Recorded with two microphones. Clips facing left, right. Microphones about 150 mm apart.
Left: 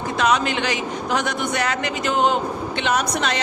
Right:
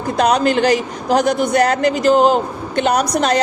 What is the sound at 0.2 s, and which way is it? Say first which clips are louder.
A man's voice: right 6 dB; 40° right (ahead or behind).